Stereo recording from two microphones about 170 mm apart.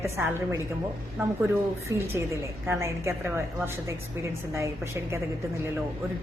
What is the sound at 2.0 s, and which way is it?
A woman's voice, 15° right (ahead or behind).